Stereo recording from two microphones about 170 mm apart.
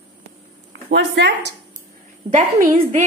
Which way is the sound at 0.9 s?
90° right.